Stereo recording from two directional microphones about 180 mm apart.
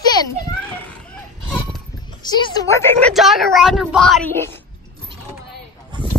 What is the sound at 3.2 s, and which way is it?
Speech, centre (ahead or behind).